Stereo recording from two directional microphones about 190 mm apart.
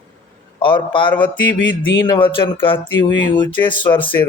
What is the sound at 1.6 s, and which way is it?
Speech, 80° left.